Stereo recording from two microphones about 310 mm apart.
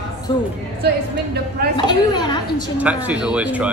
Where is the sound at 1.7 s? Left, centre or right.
Centre.